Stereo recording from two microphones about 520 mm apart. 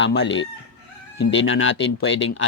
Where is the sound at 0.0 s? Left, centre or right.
Left.